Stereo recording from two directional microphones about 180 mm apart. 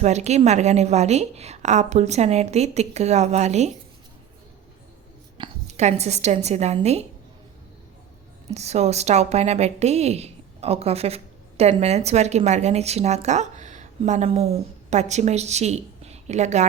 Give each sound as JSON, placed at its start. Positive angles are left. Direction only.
{"t": 0.0, "sound": "a woman's voice", "side_deg": -40}
{"t": 5.4, "sound": "a woman's voice", "side_deg": -40}
{"t": 8.4, "sound": "speech", "side_deg": -35}